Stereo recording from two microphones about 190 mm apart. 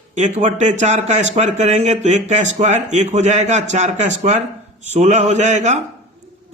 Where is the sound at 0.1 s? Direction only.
35° right (ahead or behind).